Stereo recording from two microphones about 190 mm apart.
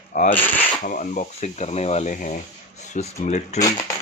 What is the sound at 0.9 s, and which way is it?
Speech, 45° left (ahead or behind).